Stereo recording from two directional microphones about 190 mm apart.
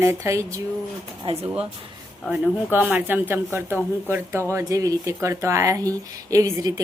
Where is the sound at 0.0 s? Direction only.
15° right (ahead or behind).